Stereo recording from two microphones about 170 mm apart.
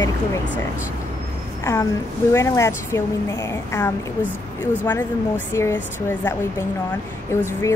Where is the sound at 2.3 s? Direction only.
15° left (ahead or behind).